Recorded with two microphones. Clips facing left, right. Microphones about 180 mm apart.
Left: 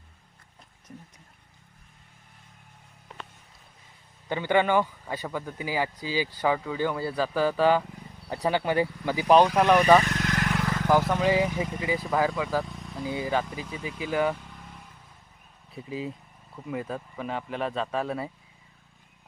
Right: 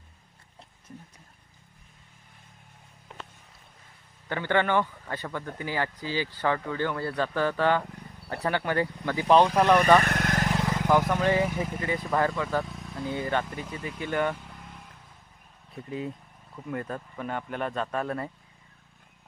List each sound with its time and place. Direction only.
4.3 s speech: 15° left (ahead or behind)
10.0 s speech: 55° right (ahead or behind)
10.4 s vehicle: 25° right (ahead or behind)
10.8 s speech: 5° left (ahead or behind)
14.3 s vehicle: centre (ahead or behind)
15.7 s speech: 5° left (ahead or behind)